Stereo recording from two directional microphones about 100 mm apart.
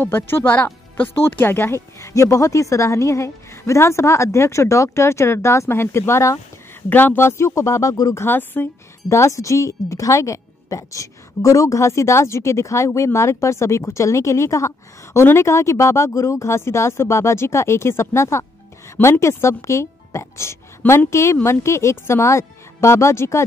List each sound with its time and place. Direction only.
0.0 s speech: 20° left (ahead or behind)
9.1 s a woman's voice: 30° left (ahead or behind)